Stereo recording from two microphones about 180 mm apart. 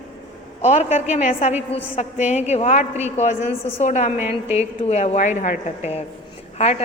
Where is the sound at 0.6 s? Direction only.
40° left (ahead or behind).